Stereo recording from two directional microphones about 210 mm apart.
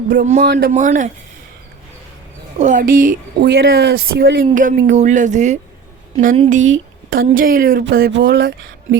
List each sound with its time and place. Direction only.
0.1 s a woman's voice: 40° right (ahead or behind)
0.7 s a woman's voice: 35° right (ahead or behind)
2.6 s a woman's voice: 35° right (ahead or behind)
7.1 s a woman's voice: 40° right (ahead or behind)